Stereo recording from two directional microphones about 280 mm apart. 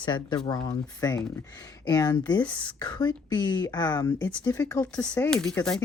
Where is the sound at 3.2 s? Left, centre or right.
Centre.